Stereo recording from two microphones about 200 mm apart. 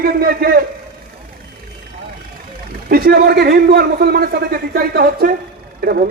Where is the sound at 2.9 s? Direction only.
50° right (ahead or behind).